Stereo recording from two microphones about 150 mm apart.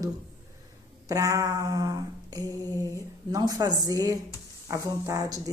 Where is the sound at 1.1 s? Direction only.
20° right (ahead or behind).